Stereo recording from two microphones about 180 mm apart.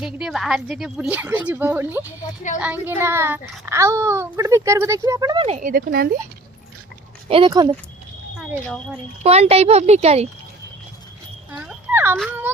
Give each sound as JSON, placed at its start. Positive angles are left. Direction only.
{"t": 0.0, "sound": "a woman's voice", "side_deg": 0}
{"t": 5.7, "sound": "speech", "side_deg": -55}
{"t": 7.3, "sound": "speech", "side_deg": -30}
{"t": 8.4, "sound": "speech", "side_deg": 5}
{"t": 9.2, "sound": "a child's voice", "side_deg": -35}
{"t": 11.7, "sound": "dog", "side_deg": -10}